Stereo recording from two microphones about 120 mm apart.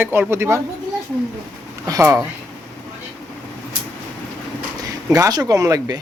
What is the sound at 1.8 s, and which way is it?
Speech, 30° right (ahead or behind).